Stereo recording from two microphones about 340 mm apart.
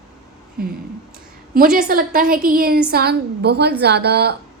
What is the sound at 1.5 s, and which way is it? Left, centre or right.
A woman's voice, right.